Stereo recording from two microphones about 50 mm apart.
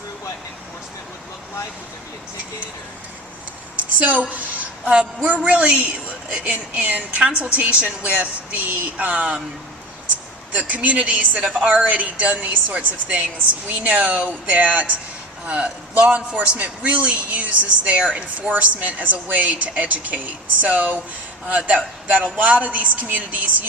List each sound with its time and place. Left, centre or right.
4.0 s a man's voice: right
10.5 s a woman's voice: right